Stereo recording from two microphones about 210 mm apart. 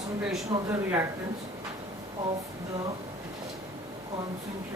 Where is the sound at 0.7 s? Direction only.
10° right (ahead or behind).